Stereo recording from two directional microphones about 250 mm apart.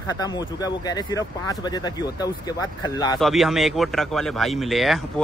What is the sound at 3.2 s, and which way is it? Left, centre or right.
Speech, centre.